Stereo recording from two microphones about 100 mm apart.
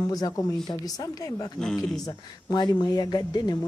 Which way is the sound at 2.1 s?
45° left (ahead or behind).